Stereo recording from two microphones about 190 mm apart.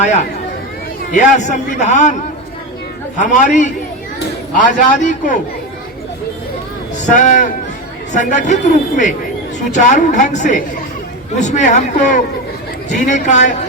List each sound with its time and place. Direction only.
1.1 s a man's voice: 40° left (ahead or behind)
3.2 s a man's voice: 40° left (ahead or behind)
7.2 s a man's voice: 40° left (ahead or behind)